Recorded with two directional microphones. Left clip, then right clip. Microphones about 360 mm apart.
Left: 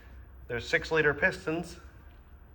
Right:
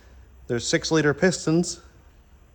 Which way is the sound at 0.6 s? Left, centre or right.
Centre.